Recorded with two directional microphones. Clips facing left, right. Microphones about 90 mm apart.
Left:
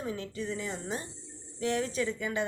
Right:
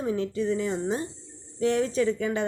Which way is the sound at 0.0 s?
35° right (ahead or behind).